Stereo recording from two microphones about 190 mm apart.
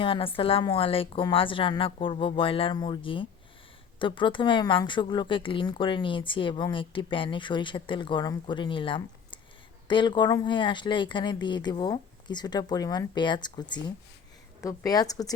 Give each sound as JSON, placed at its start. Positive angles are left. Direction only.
{"t": 0.0, "sound": "speech", "side_deg": 30}